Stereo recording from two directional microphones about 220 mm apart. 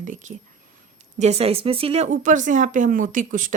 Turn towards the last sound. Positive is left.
turn(degrees=-35)  # may be behind; listen again after turning